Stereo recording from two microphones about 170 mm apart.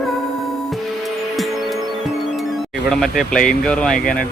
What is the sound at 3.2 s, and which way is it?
Speech, centre (ahead or behind).